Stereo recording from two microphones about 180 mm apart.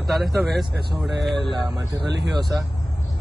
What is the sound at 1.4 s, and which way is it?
Speech, 25° right (ahead or behind).